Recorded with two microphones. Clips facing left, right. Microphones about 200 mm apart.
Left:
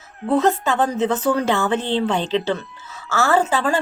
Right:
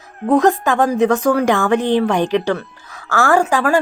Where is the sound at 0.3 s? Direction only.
15° right (ahead or behind).